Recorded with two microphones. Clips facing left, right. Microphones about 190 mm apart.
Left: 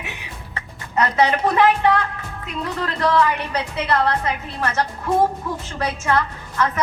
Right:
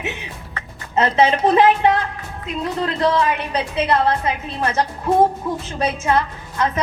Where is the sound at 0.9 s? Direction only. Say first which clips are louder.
Right 2 dB; 25° right (ahead or behind).